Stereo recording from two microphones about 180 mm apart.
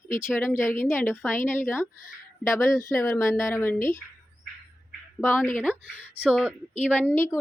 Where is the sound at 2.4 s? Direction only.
15° left (ahead or behind).